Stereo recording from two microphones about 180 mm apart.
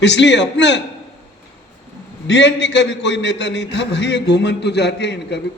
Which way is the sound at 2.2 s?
80° left.